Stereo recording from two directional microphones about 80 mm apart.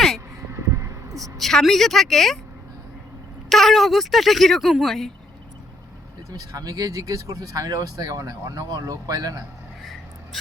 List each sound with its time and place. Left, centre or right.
0.5 s a sound: right
1.2 s a woman's voice: centre
3.5 s speech: centre
6.3 s speech: right